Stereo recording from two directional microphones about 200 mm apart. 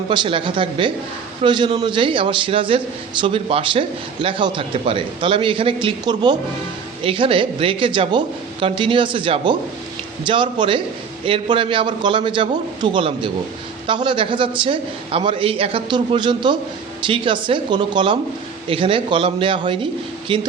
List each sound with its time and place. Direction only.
0.1 s a man's voice: 25° right (ahead or behind)